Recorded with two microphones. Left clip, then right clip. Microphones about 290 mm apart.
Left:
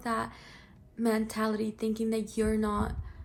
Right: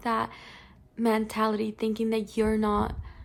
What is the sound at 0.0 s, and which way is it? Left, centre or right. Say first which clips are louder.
A woman's voice: right 4 dB; right.